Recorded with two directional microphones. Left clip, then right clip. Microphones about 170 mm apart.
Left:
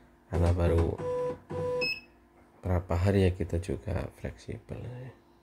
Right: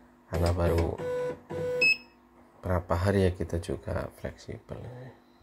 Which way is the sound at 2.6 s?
15° left (ahead or behind).